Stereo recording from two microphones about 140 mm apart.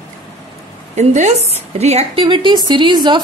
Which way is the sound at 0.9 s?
55° right (ahead or behind).